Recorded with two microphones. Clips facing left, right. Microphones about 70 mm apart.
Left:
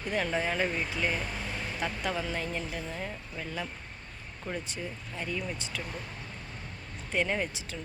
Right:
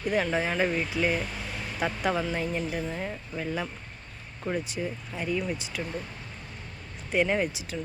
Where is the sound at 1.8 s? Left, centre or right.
Centre.